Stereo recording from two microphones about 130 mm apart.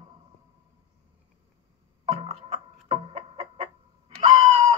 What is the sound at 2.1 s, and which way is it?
Music, 50° right (ahead or behind).